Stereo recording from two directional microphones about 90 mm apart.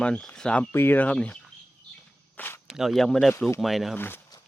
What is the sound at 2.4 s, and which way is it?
Walk, 20° left (ahead or behind).